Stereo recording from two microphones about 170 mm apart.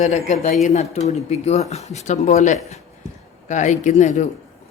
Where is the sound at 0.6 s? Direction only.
40° left (ahead or behind).